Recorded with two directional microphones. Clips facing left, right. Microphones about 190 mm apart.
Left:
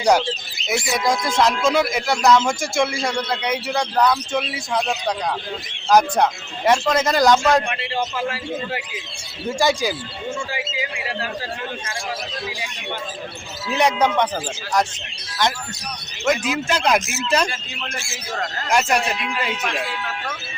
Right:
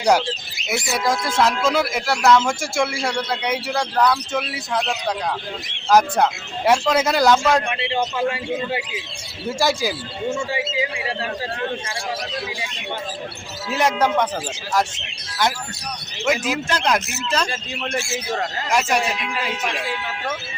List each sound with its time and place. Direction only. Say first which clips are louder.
0.7 s a man's voice: left 1 dB; 5° right (ahead or behind)
7.8 s a man's voice: right 2 dB; 20° right (ahead or behind)
9.5 s speech: left 1 dB; 5° right (ahead or behind)
10.5 s a man's voice: right 4 dB; 25° right (ahead or behind)
13.7 s speech: left 1 dB; 5° right (ahead or behind)
16.2 s speech: left 1 dB; 5° right (ahead or behind)
16.7 s speech: left 3 dB; 10° left (ahead or behind)
17.8 s speech: right 9 dB; 30° right (ahead or behind)
18.7 s speech: left 1 dB; centre (ahead or behind)